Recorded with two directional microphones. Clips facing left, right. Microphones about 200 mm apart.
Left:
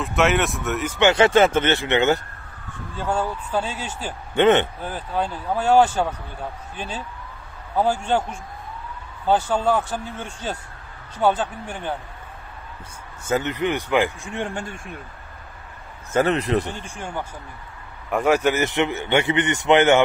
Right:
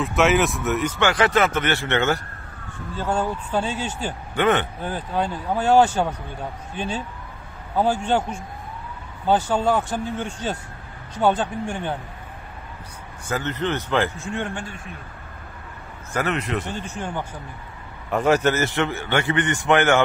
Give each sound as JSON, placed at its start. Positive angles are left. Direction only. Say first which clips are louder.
{"t": 0.0, "sound": "speech", "louder": "right 1 dB", "side_deg": 0}
{"t": 0.9, "sound": "a man's voice", "louder": "left 6 dB", "side_deg": 25}
{"t": 4.4, "sound": "a man's voice", "louder": "left 4 dB", "side_deg": 25}
{"t": 5.5, "sound": "speech", "louder": "even", "side_deg": 10}
{"t": 7.7, "sound": "speech", "louder": "even", "side_deg": 10}
{"t": 13.2, "sound": "speech", "louder": "left 3 dB", "side_deg": 20}
{"t": 14.3, "sound": "a man's voice", "louder": "even", "side_deg": 35}
{"t": 16.1, "sound": "a man's voice", "louder": "left 5 dB", "side_deg": 30}
{"t": 16.6, "sound": "a man's voice", "louder": "right 2 dB", "side_deg": 10}